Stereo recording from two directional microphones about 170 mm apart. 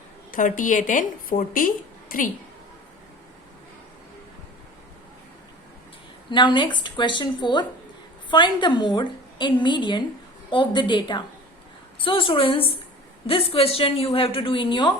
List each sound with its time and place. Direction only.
0.3 s speech: 50° left (ahead or behind)
6.3 s a woman's voice: 30° left (ahead or behind)